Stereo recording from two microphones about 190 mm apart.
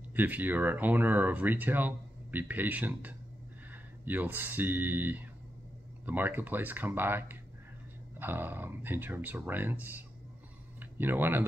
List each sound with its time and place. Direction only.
0.1 s speech: 10° right (ahead or behind)